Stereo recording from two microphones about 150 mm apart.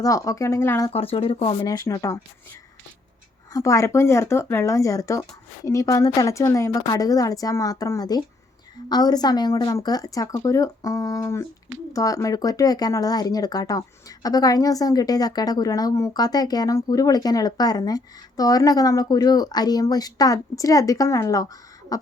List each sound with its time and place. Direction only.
0.0 s speech: 20° left (ahead or behind)
0.9 s speech: 40° left (ahead or behind)
1.6 s speech: 25° left (ahead or behind)
3.5 s speech: 20° left (ahead or behind)
21.9 s beatboxing: 25° left (ahead or behind)